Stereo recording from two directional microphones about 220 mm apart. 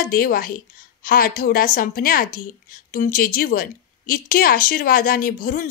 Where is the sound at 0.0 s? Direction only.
40° left (ahead or behind).